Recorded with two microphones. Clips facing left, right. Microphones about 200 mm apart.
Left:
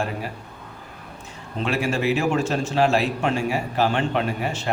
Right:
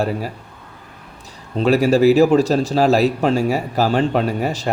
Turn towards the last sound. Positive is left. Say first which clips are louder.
# right 5 dB
turn(degrees=-40)  # may be behind; listen again after turning